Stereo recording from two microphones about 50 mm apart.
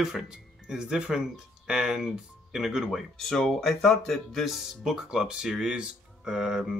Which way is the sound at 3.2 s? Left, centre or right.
Centre.